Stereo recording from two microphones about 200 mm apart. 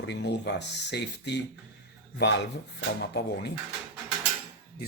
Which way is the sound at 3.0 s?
55° left (ahead or behind).